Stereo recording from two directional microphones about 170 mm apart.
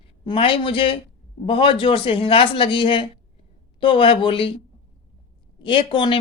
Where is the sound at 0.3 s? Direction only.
30° left (ahead or behind).